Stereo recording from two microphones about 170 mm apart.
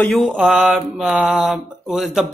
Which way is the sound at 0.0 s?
Centre (ahead or behind).